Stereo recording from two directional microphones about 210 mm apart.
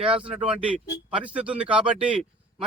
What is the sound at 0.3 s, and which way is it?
A man's voice, 5° right (ahead or behind).